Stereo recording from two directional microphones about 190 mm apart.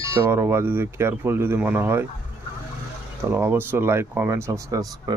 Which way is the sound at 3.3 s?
10° right (ahead or behind).